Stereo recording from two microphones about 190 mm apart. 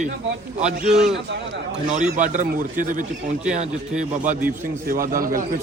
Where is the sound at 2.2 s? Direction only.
40° right (ahead or behind).